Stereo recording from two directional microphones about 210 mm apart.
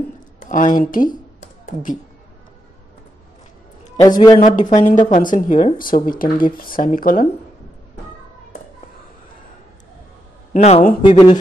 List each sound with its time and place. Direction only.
0.4 s speech: 35° left (ahead or behind)
0.9 s a sound: 40° left (ahead or behind)
4.4 s speech: 35° left (ahead or behind)
10.5 s speech: 35° left (ahead or behind)
11.1 s speech: 20° left (ahead or behind)